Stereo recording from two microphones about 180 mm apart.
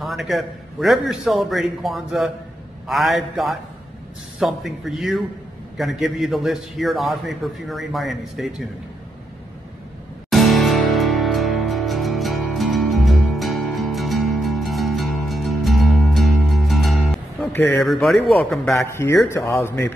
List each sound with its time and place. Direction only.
0.0 s a man's voice: centre (ahead or behind)
10.3 s music: centre (ahead or behind)
17.5 s a sound: 10° left (ahead or behind)
17.8 s a man's voice: centre (ahead or behind)
18.9 s speech: 15° left (ahead or behind)